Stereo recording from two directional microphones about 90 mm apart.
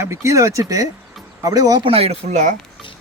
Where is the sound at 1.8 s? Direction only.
90° right.